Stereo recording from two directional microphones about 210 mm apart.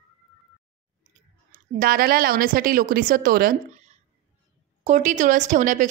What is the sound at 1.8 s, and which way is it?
A woman's voice, 45° right (ahead or behind).